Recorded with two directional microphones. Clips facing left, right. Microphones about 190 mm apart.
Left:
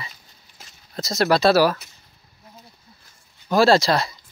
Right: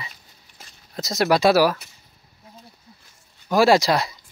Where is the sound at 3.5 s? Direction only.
15° right (ahead or behind).